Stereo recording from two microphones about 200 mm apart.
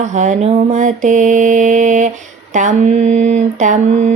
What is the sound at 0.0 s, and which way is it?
Mantra, 35° right (ahead or behind).